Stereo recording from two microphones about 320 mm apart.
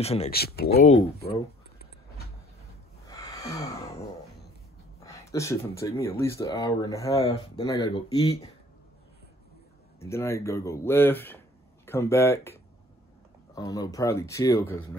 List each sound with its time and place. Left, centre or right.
0.0 s speech: centre
1.2 s a sound: left
3.1 s a sound: centre
5.0 s speech: centre
9.9 s speech: centre
13.6 s speech: centre